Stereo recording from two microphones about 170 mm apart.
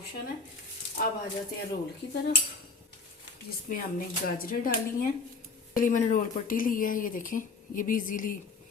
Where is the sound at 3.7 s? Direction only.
55° left (ahead or behind).